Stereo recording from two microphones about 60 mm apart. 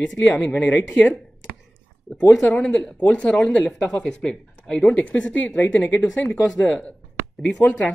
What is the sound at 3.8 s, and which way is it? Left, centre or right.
Speech, centre.